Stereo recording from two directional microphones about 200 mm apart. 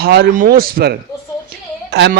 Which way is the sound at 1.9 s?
55° right (ahead or behind).